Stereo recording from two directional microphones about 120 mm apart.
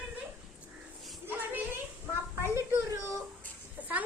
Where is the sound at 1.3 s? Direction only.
15° right (ahead or behind).